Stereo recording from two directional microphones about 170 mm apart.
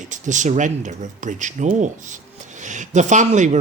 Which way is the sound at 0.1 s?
45° right (ahead or behind).